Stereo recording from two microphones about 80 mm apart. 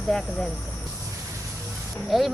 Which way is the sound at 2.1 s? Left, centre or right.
Centre.